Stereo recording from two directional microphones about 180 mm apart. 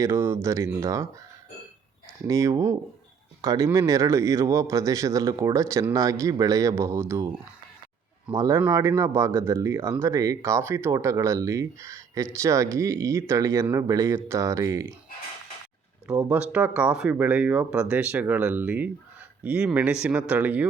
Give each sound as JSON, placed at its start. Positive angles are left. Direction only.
{"t": 0.0, "sound": "speech", "side_deg": -15}
{"t": 2.2, "sound": "speech", "side_deg": -15}
{"t": 8.4, "sound": "speech", "side_deg": -15}
{"t": 16.0, "sound": "speech", "side_deg": -5}